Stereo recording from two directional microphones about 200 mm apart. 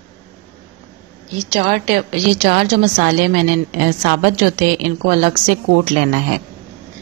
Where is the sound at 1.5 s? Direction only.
35° right (ahead or behind).